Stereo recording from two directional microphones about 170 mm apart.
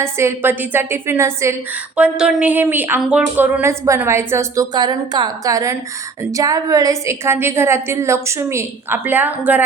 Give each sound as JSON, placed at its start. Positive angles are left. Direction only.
{"t": 0.0, "sound": "a woman's voice", "side_deg": -15}